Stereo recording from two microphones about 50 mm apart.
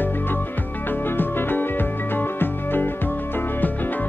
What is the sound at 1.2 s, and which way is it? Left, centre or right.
Music, left.